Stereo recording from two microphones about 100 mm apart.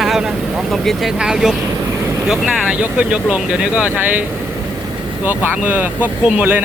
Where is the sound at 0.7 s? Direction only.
Centre (ahead or behind).